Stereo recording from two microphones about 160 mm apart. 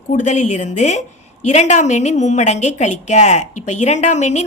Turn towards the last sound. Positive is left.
turn(degrees=45)  # may be behind; listen again after turning